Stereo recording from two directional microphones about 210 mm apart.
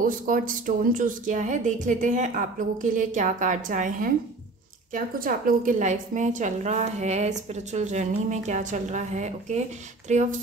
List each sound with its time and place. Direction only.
0.0 s a woman's voice: 40° right (ahead or behind)